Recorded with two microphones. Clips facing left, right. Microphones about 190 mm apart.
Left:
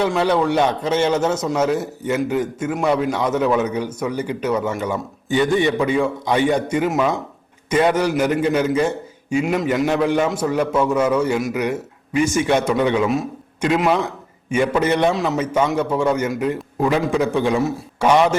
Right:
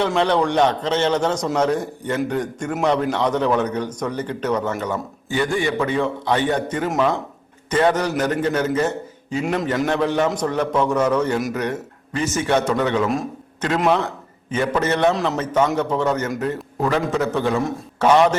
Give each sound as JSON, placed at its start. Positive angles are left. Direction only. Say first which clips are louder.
{"t": 0.0, "sound": "a man's voice", "louder": "left 1 dB", "side_deg": 5}
{"t": 5.3, "sound": "a man's voice", "louder": "left 4 dB", "side_deg": 20}
{"t": 13.1, "sound": "a man's voice", "louder": "left 2 dB", "side_deg": 0}
{"t": 15.1, "sound": "a man's voice", "louder": "left 1 dB", "side_deg": 0}